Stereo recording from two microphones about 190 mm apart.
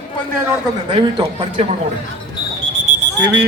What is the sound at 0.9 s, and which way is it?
Speech, 25° right (ahead or behind).